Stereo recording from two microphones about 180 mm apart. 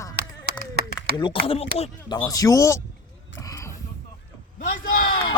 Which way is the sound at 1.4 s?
30° left (ahead or behind).